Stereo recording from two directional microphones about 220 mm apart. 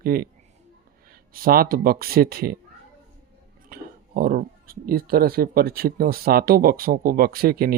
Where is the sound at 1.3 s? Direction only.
40° right (ahead or behind).